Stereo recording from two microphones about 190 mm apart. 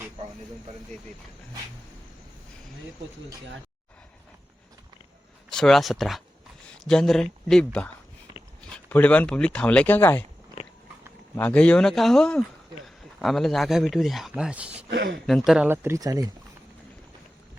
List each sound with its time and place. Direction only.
5.5 s speech: centre (ahead or behind)
11.3 s speech: 5° left (ahead or behind)
14.8 s speech: 60° right (ahead or behind)
15.3 s speech: centre (ahead or behind); by 16.3 s 20° right (ahead or behind)